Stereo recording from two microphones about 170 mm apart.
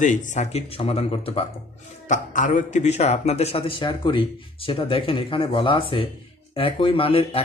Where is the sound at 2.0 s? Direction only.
45° left (ahead or behind).